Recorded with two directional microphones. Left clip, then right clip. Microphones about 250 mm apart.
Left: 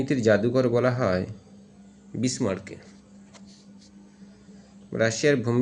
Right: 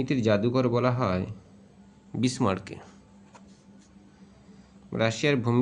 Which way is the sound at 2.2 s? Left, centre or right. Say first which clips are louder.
Even; right.